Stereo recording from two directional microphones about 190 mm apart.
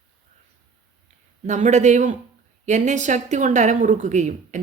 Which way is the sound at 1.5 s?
40° right (ahead or behind).